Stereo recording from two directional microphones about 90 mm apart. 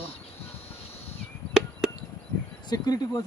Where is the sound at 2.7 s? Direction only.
45° left (ahead or behind).